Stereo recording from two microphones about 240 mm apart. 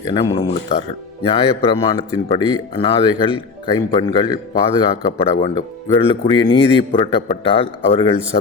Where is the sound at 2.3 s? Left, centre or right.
Left.